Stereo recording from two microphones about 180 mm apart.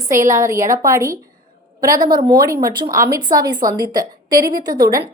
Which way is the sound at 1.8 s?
50° right (ahead or behind).